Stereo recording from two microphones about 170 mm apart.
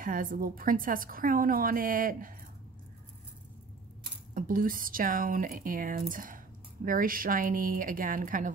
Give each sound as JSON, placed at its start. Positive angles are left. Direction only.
{"t": 0.0, "sound": "a woman's voice", "side_deg": -55}
{"t": 4.3, "sound": "speech", "side_deg": -55}